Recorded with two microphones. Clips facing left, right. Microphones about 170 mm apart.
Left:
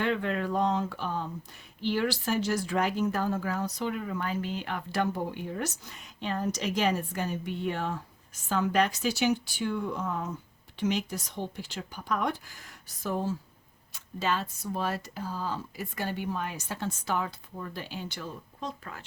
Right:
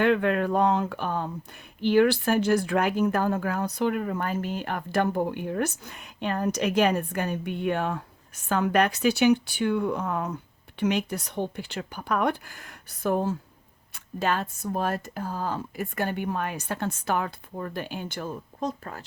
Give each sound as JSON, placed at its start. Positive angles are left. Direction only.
{"t": 0.0, "sound": "speech", "side_deg": -65}